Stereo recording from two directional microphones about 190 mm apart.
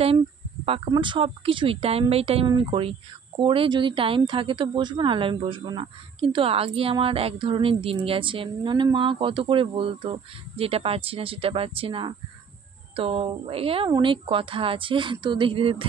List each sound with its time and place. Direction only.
0.7 s speech: 25° right (ahead or behind)